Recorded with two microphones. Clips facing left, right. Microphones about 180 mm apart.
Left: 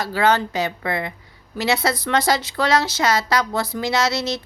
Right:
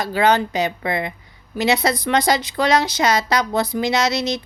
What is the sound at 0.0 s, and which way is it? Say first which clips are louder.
A woman's voice: right 2 dB; 15° right (ahead or behind).